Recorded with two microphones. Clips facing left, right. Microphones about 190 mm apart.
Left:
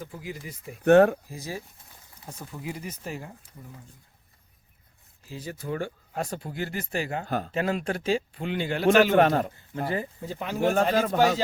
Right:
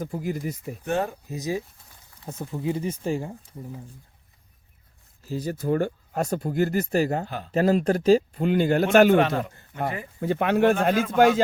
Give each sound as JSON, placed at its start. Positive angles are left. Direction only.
{"t": 0.0, "sound": "speech", "side_deg": -45}
{"t": 0.9, "sound": "speech", "side_deg": 65}
{"t": 1.3, "sound": "speech", "side_deg": -20}
{"t": 5.2, "sound": "speech", "side_deg": -40}
{"t": 7.3, "sound": "speech", "side_deg": 45}
{"t": 7.5, "sound": "speech", "side_deg": -40}
{"t": 9.1, "sound": "speech", "side_deg": 45}
{"t": 10.2, "sound": "speech", "side_deg": -65}
{"t": 10.9, "sound": "speech", "side_deg": 45}